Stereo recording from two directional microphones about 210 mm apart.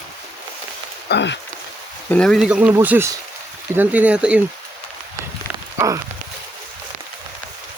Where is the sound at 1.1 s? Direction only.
55° left (ahead or behind).